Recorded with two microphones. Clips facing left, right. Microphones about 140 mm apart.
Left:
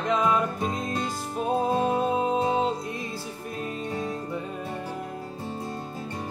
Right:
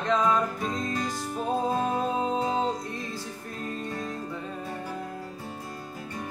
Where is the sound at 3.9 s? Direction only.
25° left (ahead or behind).